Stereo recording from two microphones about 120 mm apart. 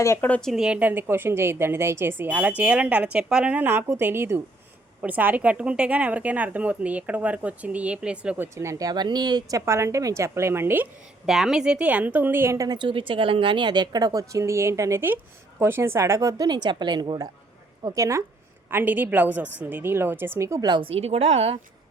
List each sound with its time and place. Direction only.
0.0 s speech: 25° left (ahead or behind)
0.3 s speech: 10° left (ahead or behind)
0.5 s a woman's voice: 10° right (ahead or behind)
8.5 s a woman's voice: 25° right (ahead or behind)
11.3 s a woman's voice: 5° right (ahead or behind); by 17.2 s 40° right (ahead or behind)
17.8 s a woman's voice: 25° right (ahead or behind)
20.7 s a woman's voice: 40° right (ahead or behind)
20.9 s a woman's voice: 60° right (ahead or behind)